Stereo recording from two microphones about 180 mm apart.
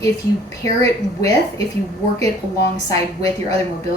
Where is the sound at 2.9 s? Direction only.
20° left (ahead or behind).